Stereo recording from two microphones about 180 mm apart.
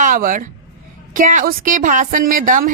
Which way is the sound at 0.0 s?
50° right (ahead or behind).